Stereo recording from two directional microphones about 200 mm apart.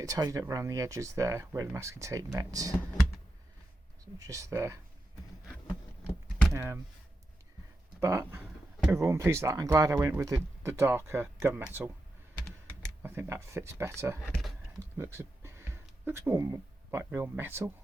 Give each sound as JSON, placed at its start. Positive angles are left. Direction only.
{"t": 0.0, "sound": "speech", "side_deg": -15}
{"t": 4.2, "sound": "speech", "side_deg": -15}
{"t": 6.5, "sound": "speech", "side_deg": -15}
{"t": 8.0, "sound": "speech", "side_deg": -15}
{"t": 13.0, "sound": "speech", "side_deg": -10}
{"t": 14.3, "sound": "a sound", "side_deg": 0}
{"t": 14.9, "sound": "speech", "side_deg": -15}